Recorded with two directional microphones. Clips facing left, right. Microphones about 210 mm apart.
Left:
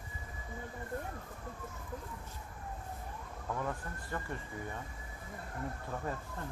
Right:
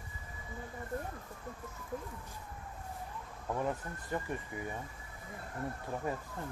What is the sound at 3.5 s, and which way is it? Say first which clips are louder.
Speech: right 4 dB; 20° right (ahead or behind).